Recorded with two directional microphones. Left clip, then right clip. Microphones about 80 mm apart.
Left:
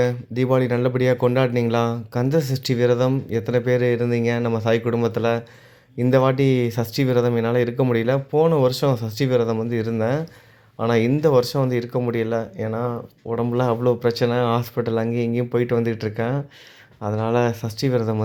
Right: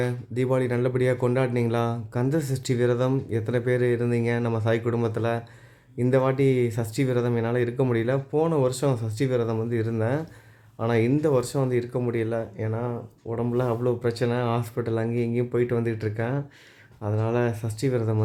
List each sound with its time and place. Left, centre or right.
0.0 s speech: left